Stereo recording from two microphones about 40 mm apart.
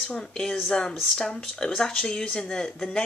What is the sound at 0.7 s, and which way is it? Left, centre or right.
Speech, centre.